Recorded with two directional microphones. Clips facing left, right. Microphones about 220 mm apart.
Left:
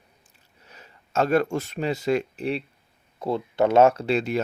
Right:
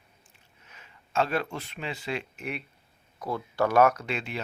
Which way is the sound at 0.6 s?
35° left (ahead or behind).